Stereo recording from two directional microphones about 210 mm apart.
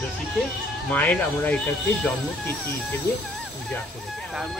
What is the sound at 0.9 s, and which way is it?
Speech, 5° left (ahead or behind).